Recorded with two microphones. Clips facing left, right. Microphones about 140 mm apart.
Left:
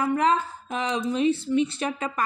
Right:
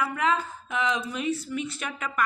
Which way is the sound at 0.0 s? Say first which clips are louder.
Left 4 dB; 35° left (ahead or behind).